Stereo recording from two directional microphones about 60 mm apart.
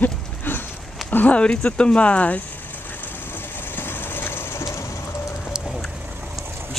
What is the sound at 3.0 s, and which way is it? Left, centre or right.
Train, left.